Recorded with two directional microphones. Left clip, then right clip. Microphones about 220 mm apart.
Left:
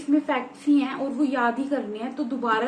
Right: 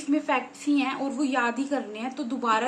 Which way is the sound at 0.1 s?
50° right (ahead or behind).